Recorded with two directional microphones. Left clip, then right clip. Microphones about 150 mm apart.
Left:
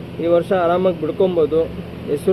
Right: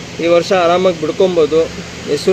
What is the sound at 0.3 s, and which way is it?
Speech, 35° right (ahead or behind).